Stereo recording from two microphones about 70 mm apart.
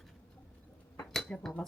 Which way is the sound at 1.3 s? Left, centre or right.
Centre.